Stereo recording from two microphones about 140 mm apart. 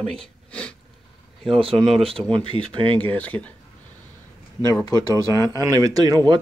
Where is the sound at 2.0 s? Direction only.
40° right (ahead or behind).